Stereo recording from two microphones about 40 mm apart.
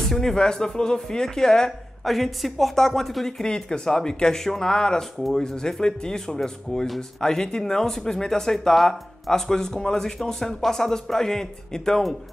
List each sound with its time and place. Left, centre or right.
0.1 s speech: centre
2.0 s speech: centre